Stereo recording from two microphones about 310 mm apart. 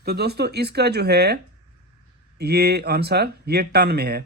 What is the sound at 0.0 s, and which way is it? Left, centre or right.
Speech, right.